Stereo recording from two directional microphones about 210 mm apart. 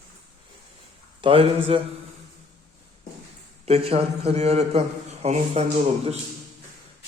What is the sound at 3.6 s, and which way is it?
A man's voice, 30° right (ahead or behind).